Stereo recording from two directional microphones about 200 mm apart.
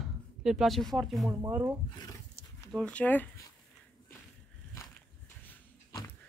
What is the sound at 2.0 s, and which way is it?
Speech, 15° left (ahead or behind).